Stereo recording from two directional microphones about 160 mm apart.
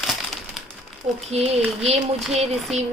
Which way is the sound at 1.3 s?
40° right (ahead or behind).